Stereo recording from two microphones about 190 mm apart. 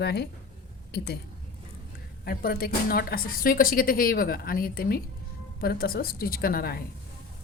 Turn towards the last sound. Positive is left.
turn(degrees=50)  # may be behind; listen again after turning